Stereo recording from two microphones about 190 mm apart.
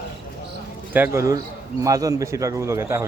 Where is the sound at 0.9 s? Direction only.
10° right (ahead or behind).